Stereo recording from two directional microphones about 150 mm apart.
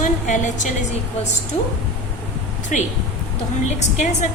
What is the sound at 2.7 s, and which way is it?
Speech, 55° left (ahead or behind).